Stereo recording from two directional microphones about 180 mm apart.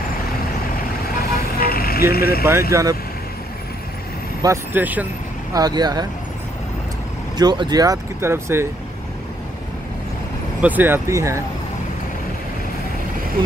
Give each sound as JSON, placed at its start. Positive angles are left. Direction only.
{"t": 1.1, "sound": "vehicle", "side_deg": 55}
{"t": 2.7, "sound": "speech", "side_deg": -20}
{"t": 4.4, "sound": "speech", "side_deg": -15}
{"t": 5.5, "sound": "speech", "side_deg": -20}
{"t": 7.3, "sound": "speech", "side_deg": -25}
{"t": 10.6, "sound": "speech", "side_deg": -10}